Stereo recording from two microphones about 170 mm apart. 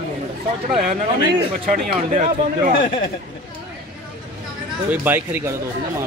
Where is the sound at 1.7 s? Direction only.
50° right (ahead or behind).